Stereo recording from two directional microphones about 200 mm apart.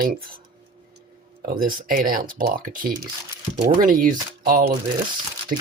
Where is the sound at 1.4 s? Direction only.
45° right (ahead or behind).